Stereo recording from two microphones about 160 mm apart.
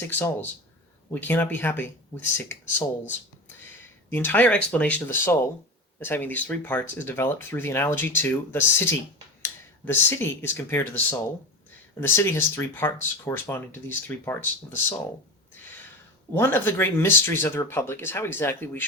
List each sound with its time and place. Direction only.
0.1 s speech: 15° left (ahead or behind)
2.1 s speech: 25° left (ahead or behind)
16.3 s speech: 15° left (ahead or behind)